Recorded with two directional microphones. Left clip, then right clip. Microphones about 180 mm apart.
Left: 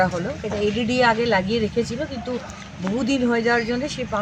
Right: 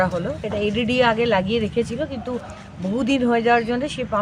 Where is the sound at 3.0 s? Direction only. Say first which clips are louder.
Right 2 dB; 25° right (ahead or behind).